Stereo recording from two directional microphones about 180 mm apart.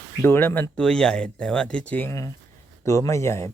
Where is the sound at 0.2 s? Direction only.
10° left (ahead or behind).